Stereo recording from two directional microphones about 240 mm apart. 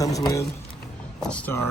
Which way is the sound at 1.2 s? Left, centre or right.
Centre.